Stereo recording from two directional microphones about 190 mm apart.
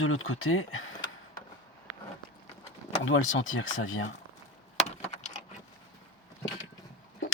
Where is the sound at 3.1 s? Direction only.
90° left.